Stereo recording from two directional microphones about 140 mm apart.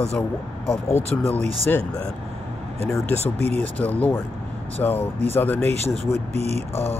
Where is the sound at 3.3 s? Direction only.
50° right (ahead or behind).